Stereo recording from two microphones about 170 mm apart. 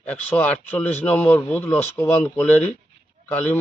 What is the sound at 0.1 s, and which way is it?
A man's voice, 10° left (ahead or behind).